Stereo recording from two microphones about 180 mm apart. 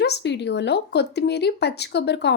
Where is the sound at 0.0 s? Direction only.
70° left (ahead or behind).